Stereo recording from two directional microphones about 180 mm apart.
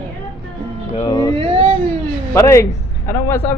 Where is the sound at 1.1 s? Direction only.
20° left (ahead or behind).